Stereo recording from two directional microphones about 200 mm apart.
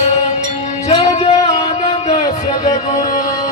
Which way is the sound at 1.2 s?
35° left (ahead or behind).